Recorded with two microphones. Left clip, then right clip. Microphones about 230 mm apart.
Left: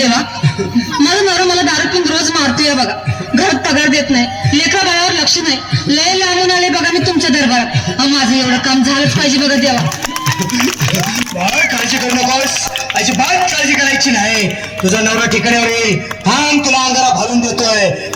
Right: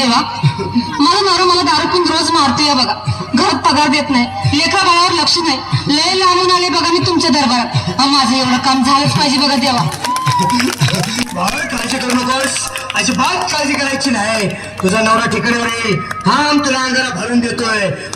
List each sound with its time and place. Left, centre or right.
1.0 s a sound: centre
3.3 s speech: centre
13.9 s speech: right
15.2 s speech: centre